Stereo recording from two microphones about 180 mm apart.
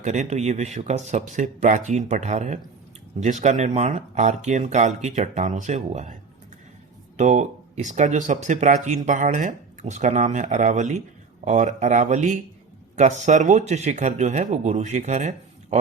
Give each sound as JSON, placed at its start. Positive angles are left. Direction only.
{"t": 0.0, "sound": "speech", "side_deg": -40}
{"t": 7.2, "sound": "speech", "side_deg": -40}